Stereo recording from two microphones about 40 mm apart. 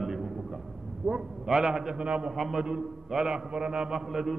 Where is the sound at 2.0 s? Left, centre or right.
Right.